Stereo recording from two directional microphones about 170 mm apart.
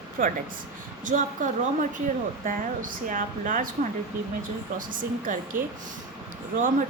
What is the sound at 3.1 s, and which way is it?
Speech, 50° right (ahead or behind).